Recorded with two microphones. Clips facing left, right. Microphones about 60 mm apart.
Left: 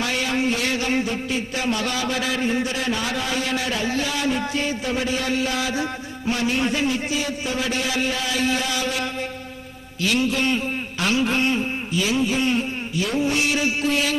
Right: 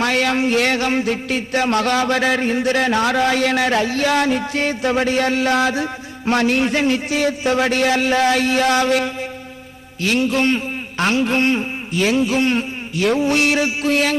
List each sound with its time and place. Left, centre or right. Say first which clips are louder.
0.0 s a man's voice: right 5 dB; right
2.6 s a man's voice: right 8 dB; right
6.2 s a man's voice: right 6 dB; right
10.0 s a man's voice: right 4 dB; right